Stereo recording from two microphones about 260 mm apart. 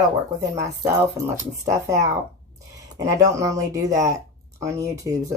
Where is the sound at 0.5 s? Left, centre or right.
Centre.